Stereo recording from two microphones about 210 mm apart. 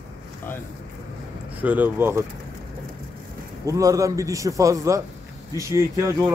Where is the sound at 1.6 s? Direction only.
10° right (ahead or behind).